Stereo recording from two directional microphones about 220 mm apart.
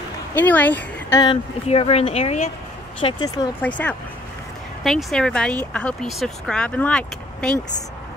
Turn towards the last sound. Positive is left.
turn(degrees=5)  # may be behind; listen again after turning